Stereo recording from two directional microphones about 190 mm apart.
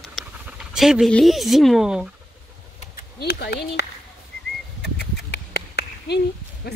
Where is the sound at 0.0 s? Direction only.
Centre (ahead or behind).